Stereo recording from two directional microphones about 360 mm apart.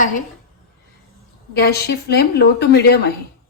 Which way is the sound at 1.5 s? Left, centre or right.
Left.